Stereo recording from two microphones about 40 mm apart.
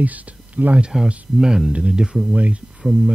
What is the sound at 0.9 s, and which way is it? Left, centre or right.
Speech, centre.